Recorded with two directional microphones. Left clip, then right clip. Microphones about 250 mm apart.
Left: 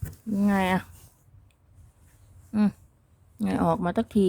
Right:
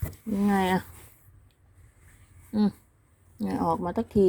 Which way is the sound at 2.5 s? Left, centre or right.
Centre.